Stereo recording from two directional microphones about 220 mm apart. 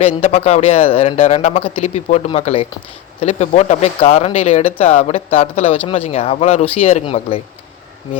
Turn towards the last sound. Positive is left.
turn(degrees=25)  # may be behind; listen again after turning